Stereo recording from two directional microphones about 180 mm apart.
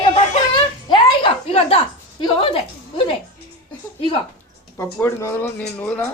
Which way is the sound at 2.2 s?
30° left (ahead or behind).